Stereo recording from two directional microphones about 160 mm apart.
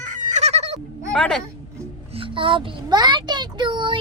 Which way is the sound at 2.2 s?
30° right (ahead or behind).